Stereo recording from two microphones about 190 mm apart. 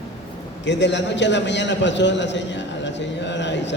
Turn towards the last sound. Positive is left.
turn(degrees=70)  # may be behind; listen again after turning